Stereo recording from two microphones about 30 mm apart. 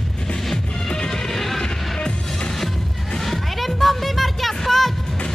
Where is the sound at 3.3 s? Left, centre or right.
Centre.